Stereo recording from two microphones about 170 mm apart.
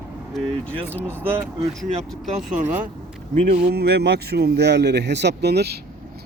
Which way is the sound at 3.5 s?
65° right (ahead or behind).